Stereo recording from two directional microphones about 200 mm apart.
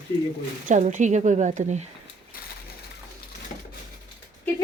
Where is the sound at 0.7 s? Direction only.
40° right (ahead or behind).